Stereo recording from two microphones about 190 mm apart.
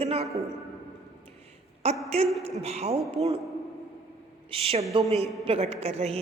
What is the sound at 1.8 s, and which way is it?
Speech, 30° right (ahead or behind).